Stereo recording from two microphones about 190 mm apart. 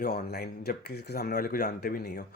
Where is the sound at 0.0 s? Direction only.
55° left (ahead or behind).